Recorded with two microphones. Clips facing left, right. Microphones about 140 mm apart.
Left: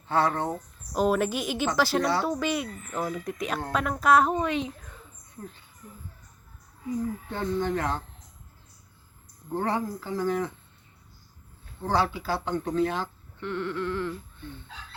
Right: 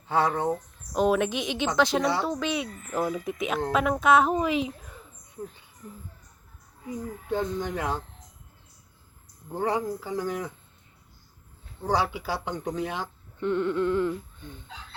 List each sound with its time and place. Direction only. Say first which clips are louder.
0.1 s speech: right 1 dB; 15° right (ahead or behind)
0.9 s a woman's voice: right 1 dB; centre (ahead or behind)
7.3 s speech: right 2 dB; 15° right (ahead or behind)
9.6 s speech: right 1 dB; 10° right (ahead or behind)
11.9 s speech: even; 15° right (ahead or behind)